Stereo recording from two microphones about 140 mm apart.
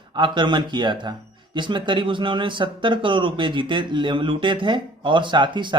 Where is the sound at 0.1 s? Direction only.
35° right (ahead or behind).